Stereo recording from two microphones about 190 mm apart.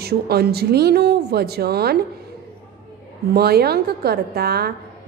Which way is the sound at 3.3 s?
55° right (ahead or behind).